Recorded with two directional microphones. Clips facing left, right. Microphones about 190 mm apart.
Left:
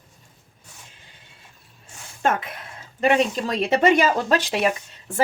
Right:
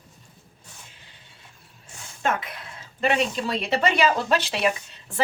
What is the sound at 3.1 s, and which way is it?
Speech, 45° left (ahead or behind).